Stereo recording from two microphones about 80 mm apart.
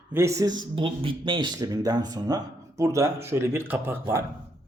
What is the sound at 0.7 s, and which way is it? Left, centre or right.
Speech, right.